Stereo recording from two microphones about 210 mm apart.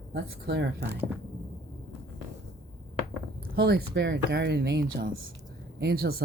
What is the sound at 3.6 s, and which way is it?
Speech, 50° right (ahead or behind).